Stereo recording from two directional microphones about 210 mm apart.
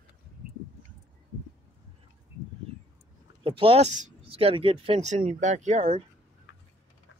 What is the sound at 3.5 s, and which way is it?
Speech, 25° right (ahead or behind).